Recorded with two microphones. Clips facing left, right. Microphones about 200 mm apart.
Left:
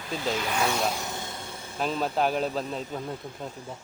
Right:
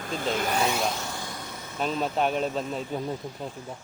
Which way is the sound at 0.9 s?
20° left (ahead or behind).